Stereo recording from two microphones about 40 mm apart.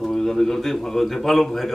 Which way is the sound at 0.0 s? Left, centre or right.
Centre.